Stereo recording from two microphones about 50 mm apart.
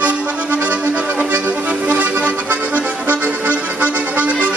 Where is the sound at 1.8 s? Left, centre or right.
Right.